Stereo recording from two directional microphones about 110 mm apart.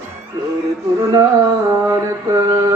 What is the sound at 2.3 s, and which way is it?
Speech, 30° right (ahead or behind).